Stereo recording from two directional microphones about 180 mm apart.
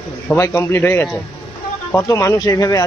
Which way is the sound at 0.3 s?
15° left (ahead or behind).